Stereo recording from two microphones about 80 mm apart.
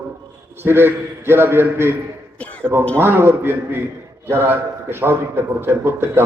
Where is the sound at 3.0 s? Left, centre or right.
Right.